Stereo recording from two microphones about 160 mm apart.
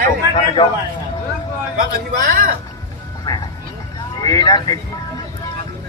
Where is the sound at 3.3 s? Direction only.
25° left (ahead or behind).